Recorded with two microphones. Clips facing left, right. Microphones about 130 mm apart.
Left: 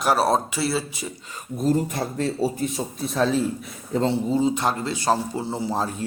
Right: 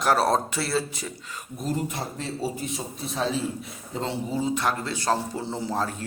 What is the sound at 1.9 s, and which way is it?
A man's voice, 50° left (ahead or behind).